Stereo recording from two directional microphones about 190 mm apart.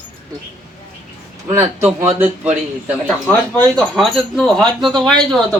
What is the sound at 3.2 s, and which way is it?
Speech, 5° left (ahead or behind).